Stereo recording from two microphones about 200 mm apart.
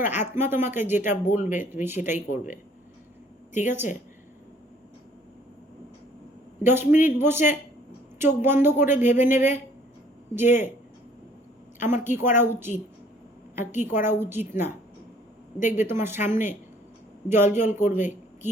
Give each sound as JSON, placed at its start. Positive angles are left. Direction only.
{"t": 0.3, "sound": "speech", "side_deg": -10}
{"t": 3.5, "sound": "a woman's voice", "side_deg": 35}
{"t": 6.6, "sound": "a man's voice", "side_deg": -10}
{"t": 11.9, "sound": "speech", "side_deg": -10}
{"t": 15.5, "sound": "a woman's voice", "side_deg": 40}
{"t": 16.0, "sound": "speech", "side_deg": -10}
{"t": 17.7, "sound": "a woman's voice", "side_deg": 40}